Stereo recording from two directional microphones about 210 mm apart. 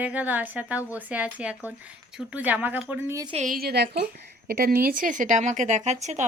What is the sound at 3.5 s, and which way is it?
Speech, 50° right (ahead or behind).